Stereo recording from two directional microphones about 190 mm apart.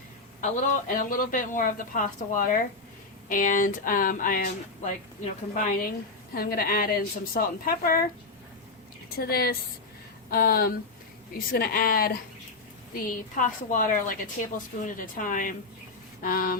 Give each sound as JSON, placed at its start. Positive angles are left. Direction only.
{"t": 0.4, "sound": "speech", "side_deg": 45}
{"t": 6.3, "sound": "speech", "side_deg": 50}
{"t": 9.1, "sound": "speech", "side_deg": 55}